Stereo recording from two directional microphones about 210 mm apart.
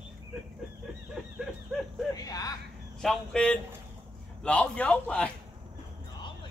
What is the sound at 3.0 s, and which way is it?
A man's voice, 5° left (ahead or behind).